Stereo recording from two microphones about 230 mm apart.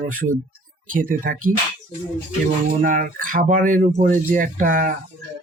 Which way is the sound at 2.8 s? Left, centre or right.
Right.